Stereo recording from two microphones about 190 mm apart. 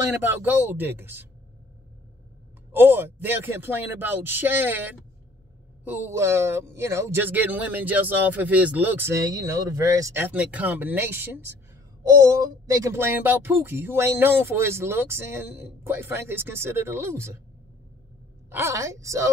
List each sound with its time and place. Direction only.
0.1 s speech: 10° right (ahead or behind)
2.7 s speech: 10° right (ahead or behind)
12.6 s speech: 15° right (ahead or behind)
18.5 s speech: 15° right (ahead or behind)